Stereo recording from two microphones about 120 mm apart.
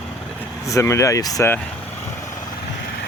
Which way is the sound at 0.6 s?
25° left (ahead or behind).